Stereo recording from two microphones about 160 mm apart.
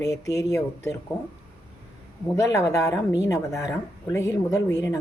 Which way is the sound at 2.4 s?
20° left (ahead or behind).